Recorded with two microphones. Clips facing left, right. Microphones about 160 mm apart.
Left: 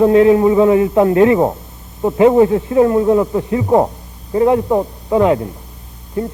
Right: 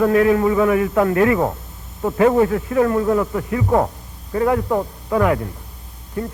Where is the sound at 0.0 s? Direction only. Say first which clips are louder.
Left 5 dB; 25° left (ahead or behind).